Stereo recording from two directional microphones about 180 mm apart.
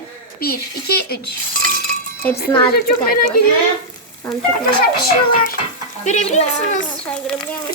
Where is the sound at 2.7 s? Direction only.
55° left (ahead or behind).